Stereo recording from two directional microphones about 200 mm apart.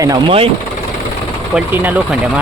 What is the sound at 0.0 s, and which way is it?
Speech, 25° right (ahead or behind).